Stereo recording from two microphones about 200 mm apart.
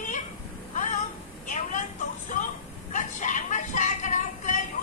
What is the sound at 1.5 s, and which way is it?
Vehicle, 40° left (ahead or behind).